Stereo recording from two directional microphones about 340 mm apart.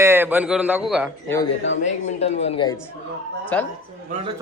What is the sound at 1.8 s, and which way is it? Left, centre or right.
Speech, centre.